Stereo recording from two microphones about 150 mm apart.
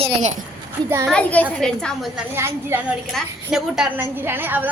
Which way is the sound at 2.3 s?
15° right (ahead or behind).